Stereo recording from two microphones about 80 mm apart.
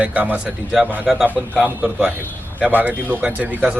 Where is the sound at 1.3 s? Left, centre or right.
Left.